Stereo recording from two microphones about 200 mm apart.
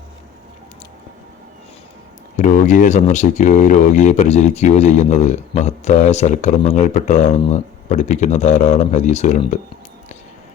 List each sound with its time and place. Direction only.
2.3 s speech: 40° left (ahead or behind)